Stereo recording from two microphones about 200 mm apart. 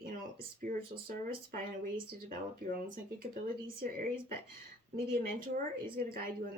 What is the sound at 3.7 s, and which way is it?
Speech, 45° right (ahead or behind).